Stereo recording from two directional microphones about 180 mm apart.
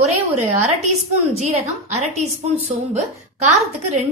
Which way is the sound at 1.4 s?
40° right (ahead or behind).